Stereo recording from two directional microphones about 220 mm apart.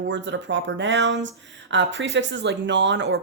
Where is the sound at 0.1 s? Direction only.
55° right (ahead or behind).